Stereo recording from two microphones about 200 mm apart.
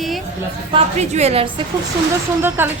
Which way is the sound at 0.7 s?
35° right (ahead or behind).